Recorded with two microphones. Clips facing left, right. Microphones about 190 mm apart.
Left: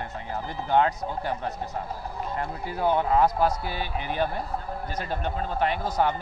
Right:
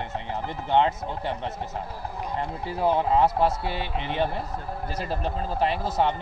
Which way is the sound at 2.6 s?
30° right (ahead or behind).